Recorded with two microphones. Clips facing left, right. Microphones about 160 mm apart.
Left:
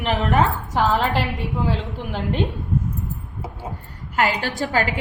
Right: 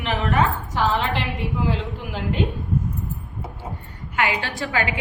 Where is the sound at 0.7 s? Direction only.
40° left (ahead or behind).